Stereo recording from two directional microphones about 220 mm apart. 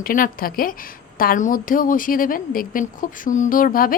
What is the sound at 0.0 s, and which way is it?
A woman's voice, 40° left (ahead or behind).